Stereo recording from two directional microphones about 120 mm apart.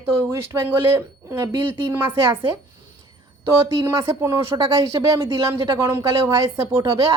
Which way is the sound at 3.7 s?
25° right (ahead or behind).